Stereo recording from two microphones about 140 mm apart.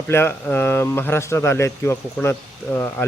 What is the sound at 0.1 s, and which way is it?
Speech, 15° left (ahead or behind).